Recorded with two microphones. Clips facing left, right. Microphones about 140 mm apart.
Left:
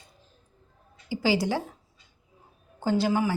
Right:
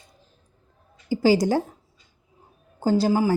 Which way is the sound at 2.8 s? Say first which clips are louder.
Right 4 dB; 35° right (ahead or behind).